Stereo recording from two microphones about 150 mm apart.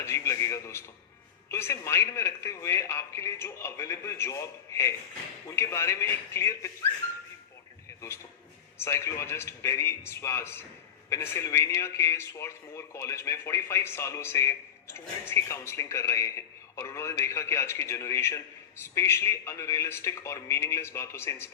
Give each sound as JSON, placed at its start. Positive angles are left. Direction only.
{"t": 0.0, "sound": "a sound", "side_deg": 20}
{"t": 1.5, "sound": "a man's voice", "side_deg": 20}
{"t": 8.8, "sound": "a man's voice", "side_deg": 20}